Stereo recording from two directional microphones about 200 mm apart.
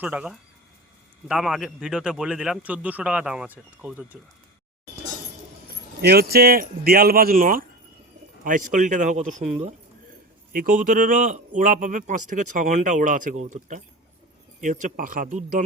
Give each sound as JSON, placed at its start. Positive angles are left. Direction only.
{"t": 0.0, "sound": "a man's voice", "side_deg": -5}
{"t": 6.0, "sound": "a man's voice", "side_deg": -50}